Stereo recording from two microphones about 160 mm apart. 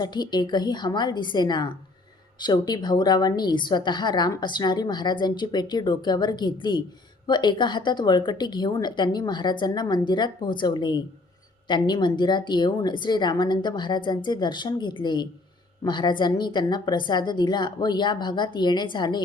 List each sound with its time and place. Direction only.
0.0 s a woman's voice: 25° left (ahead or behind)